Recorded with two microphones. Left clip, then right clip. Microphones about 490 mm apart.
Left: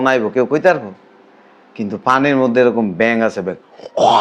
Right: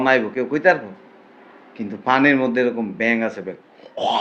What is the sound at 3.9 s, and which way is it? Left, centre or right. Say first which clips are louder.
Wail: left 9 dB; left.